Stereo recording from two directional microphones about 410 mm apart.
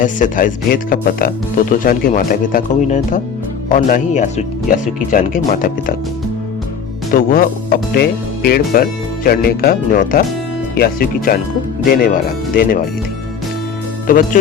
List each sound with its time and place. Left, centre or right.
0.0 s speech: centre
7.1 s speech: left
14.1 s speech: centre